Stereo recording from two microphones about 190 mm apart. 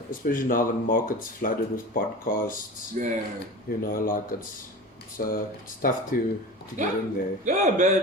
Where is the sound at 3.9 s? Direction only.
50° left (ahead or behind).